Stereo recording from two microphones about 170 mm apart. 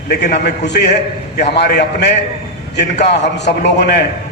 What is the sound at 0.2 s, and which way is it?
A man's voice, 70° left (ahead or behind).